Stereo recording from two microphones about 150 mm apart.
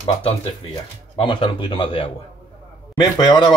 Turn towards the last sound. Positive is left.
turn(degrees=30)  # may be behind; listen again after turning